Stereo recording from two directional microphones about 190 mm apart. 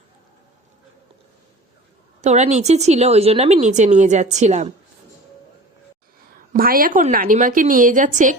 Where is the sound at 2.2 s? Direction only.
35° right (ahead or behind).